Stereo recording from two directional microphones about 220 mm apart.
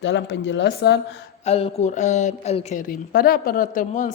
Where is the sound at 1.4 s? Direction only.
30° left (ahead or behind).